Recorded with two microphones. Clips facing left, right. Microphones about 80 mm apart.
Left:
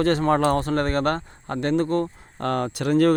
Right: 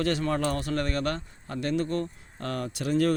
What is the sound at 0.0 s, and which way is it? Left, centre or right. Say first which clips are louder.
Speech: left 7 dB; left.